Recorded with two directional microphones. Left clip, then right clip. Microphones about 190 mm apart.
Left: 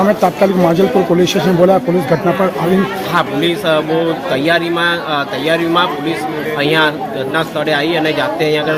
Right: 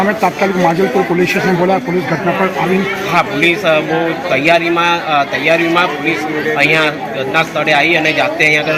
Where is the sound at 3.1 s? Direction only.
15° left (ahead or behind).